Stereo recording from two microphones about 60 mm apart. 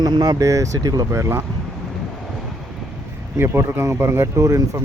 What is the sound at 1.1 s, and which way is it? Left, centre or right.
Speech, right.